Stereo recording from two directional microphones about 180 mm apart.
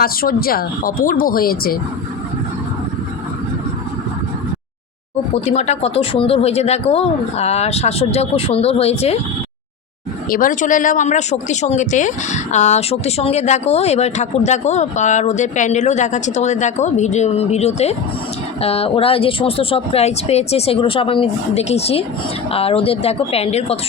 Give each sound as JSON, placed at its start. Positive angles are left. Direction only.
{"t": 0.0, "sound": "speech", "side_deg": 55}
{"t": 5.3, "sound": "speech", "side_deg": 40}
{"t": 10.2, "sound": "speech", "side_deg": 50}